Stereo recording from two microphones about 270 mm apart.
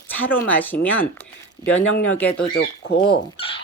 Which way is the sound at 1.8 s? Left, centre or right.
Left.